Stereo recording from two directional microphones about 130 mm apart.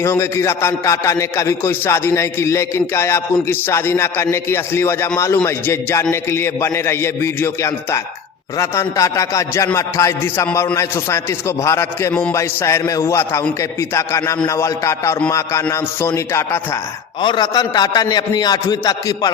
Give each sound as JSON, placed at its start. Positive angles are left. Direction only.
{"t": 0.0, "sound": "a man's voice", "side_deg": 20}
{"t": 17.2, "sound": "a man's voice", "side_deg": 35}